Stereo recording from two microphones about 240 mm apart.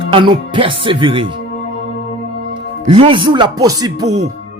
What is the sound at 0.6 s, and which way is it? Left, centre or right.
Speech, right.